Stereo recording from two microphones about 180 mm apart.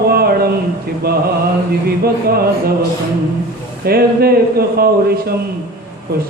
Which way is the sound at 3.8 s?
60° right (ahead or behind).